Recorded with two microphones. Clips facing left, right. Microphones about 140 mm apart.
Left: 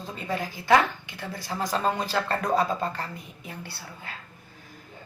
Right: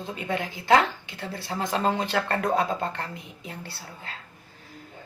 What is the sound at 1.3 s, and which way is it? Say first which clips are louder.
Speech: right 1 dB; 25° right (ahead or behind).